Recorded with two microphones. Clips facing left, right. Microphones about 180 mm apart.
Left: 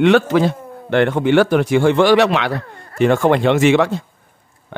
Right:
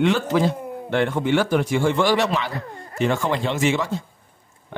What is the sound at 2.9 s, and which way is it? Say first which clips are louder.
Speech: left 8 dB; 60° left (ahead or behind).